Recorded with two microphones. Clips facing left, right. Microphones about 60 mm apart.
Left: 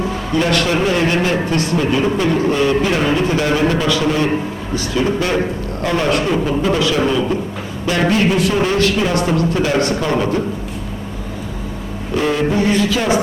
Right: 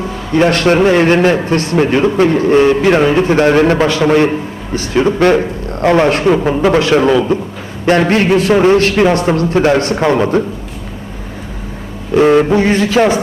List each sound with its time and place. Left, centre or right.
0.3 s a man's voice: right
12.1 s a man's voice: right